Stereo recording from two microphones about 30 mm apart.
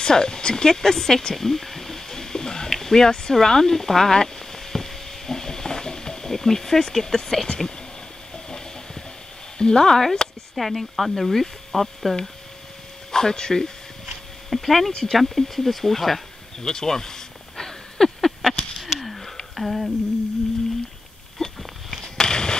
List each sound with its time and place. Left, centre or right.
0.0 s speech: left
1.3 s a sound: centre
3.1 s speech: left
3.3 s speech: centre
4.1 s frying: centre
7.4 s speech: centre
9.6 s speech: left
10.5 s speech: centre
13.1 s speech: centre
14.5 s speech: centre
16.6 s a sound: centre
18.6 s a sound: centre
21.4 s a sound: centre